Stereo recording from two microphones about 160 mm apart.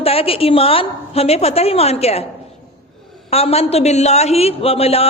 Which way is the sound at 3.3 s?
40° left (ahead or behind).